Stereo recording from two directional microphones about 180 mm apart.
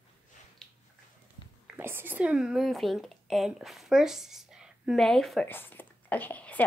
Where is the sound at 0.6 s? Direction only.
5° left (ahead or behind).